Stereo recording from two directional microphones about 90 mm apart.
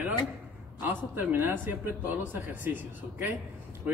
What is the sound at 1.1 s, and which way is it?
Speech, 20° right (ahead or behind).